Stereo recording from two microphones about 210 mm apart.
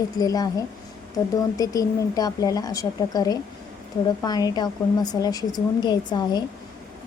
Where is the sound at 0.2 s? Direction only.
20° left (ahead or behind).